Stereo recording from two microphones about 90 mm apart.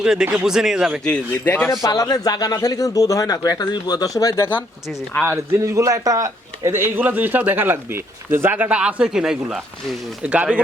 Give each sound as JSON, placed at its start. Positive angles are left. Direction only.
{"t": 0.0, "sound": "speech", "side_deg": -10}
{"t": 1.5, "sound": "speech", "side_deg": 20}
{"t": 1.8, "sound": "speech", "side_deg": 45}
{"t": 5.2, "sound": "a man's voice", "side_deg": -30}
{"t": 6.7, "sound": "speech", "side_deg": -25}